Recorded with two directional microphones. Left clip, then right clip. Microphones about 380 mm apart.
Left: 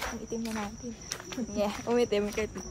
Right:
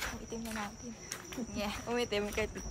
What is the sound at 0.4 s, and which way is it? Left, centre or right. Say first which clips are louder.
Speech: left 4 dB; centre.